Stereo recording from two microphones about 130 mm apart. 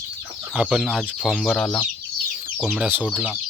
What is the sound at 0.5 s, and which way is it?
Speech, 5° right (ahead or behind).